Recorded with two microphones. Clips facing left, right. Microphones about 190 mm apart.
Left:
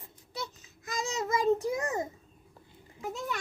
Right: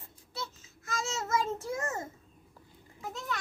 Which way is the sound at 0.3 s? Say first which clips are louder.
Left 2 dB; 15° left (ahead or behind).